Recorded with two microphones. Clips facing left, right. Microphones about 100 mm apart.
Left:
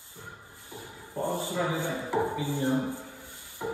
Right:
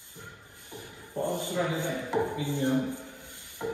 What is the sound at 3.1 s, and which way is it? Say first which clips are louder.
Music: left 1 dB; 20° right (ahead or behind).